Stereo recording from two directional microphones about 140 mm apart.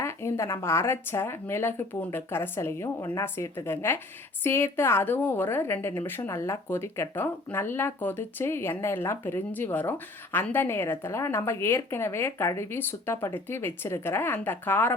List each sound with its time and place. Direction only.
0.0 s a woman's voice: 20° left (ahead or behind)